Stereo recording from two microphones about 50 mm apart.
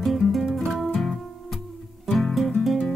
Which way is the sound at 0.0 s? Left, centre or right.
Centre.